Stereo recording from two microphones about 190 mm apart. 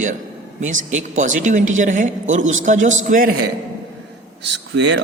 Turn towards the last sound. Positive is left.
turn(degrees=-65)  # may be behind; listen again after turning